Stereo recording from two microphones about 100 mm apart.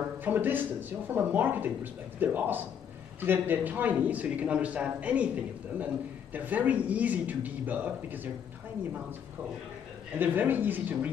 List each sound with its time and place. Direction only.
0.2 s a man's voice: 20° right (ahead or behind)
10.1 s speech: 20° right (ahead or behind)